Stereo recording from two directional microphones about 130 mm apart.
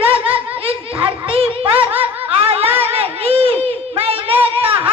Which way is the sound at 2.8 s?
50° right (ahead or behind).